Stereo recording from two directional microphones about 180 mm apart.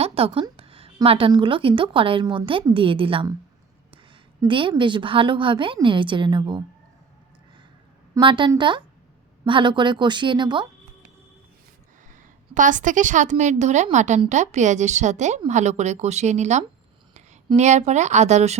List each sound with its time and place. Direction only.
0.0 s a woman's voice: 30° right (ahead or behind)
8.1 s a woman's voice: 25° right (ahead or behind)
12.5 s a woman's voice: 45° right (ahead or behind)